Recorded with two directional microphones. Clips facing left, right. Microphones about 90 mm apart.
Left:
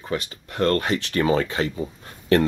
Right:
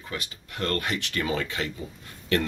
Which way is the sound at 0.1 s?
35° left (ahead or behind).